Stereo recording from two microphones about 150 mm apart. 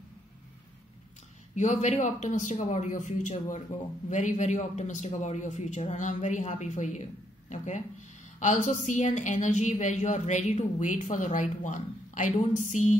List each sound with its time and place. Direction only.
1.5 s a woman's voice: 50° left (ahead or behind)